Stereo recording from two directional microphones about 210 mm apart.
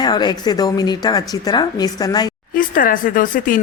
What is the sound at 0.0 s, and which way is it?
A woman's voice, 20° left (ahead or behind).